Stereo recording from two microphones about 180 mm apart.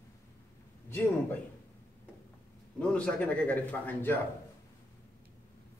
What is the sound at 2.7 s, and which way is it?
Mantra, 5° left (ahead or behind).